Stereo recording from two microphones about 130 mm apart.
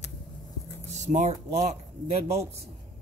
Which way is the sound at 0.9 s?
65° right (ahead or behind).